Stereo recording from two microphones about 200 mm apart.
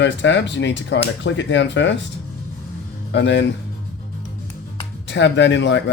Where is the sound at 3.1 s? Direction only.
60° left (ahead or behind).